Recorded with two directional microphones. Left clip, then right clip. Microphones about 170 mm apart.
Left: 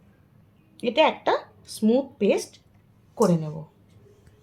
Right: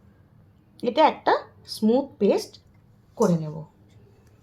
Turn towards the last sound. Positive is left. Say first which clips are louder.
# left 1 dB
turn(degrees=5)  # may be behind; listen again after turning